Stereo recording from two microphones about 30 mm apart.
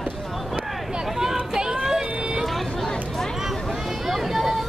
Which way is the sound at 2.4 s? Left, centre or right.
Centre.